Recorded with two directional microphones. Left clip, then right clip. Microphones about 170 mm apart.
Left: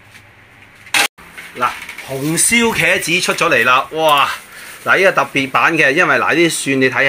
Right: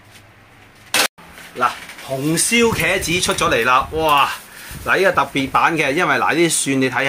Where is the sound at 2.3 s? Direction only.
45° left (ahead or behind).